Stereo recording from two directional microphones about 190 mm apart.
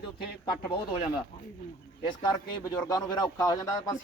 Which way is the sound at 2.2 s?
20° left (ahead or behind).